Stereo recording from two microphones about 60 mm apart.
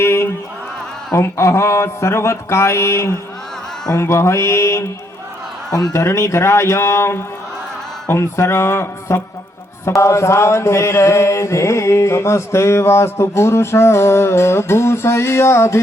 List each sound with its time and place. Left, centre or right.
0.0 s a sound: left
1.1 s mantra: left
5.9 s mantra: left